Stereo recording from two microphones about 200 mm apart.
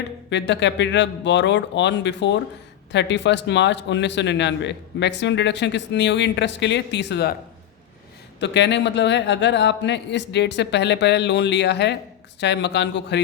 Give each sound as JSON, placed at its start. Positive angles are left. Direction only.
{"t": 0.3, "sound": "speech", "side_deg": 60}
{"t": 8.4, "sound": "speech", "side_deg": 60}